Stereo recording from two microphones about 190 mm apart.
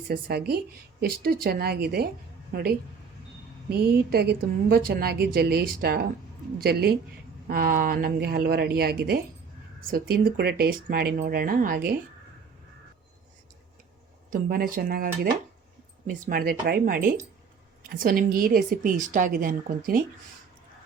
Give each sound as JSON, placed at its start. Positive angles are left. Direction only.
{"t": 0.1, "sound": "a woman's voice", "side_deg": -55}
{"t": 14.3, "sound": "a woman's voice", "side_deg": -50}